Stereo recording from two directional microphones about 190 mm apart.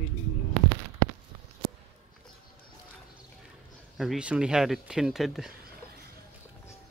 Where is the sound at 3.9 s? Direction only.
5° right (ahead or behind).